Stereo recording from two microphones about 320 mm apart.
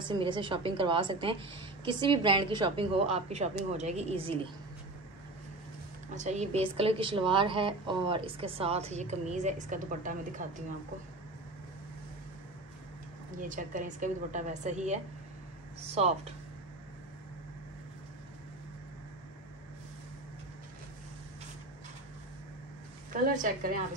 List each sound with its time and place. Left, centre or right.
0.1 s a woman's voice: centre
6.1 s a woman's voice: right
13.4 s a woman's voice: right
23.3 s a woman's voice: right